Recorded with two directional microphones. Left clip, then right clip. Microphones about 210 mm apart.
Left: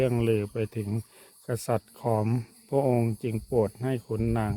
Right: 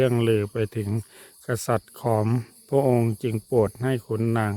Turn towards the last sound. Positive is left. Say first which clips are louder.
# right 4 dB
turn(degrees=-20)  # may be behind; listen again after turning